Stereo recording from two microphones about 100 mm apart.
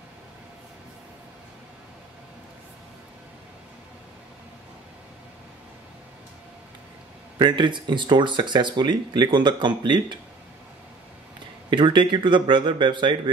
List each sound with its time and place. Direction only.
7.3 s speech: 50° right (ahead or behind)
11.7 s speech: 55° right (ahead or behind)